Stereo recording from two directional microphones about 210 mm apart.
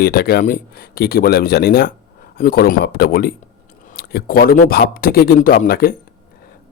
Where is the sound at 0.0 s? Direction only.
45° left (ahead or behind).